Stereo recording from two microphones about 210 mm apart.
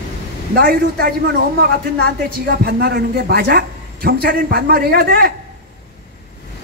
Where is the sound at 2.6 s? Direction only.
45° right (ahead or behind).